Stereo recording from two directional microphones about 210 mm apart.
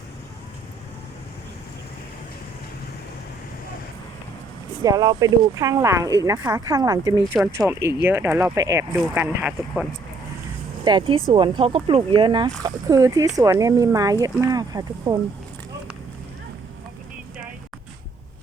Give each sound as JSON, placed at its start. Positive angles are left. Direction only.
{"t": 4.8, "sound": "speech", "side_deg": -20}
{"t": 7.3, "sound": "speech", "side_deg": -5}
{"t": 10.8, "sound": "speech", "side_deg": -25}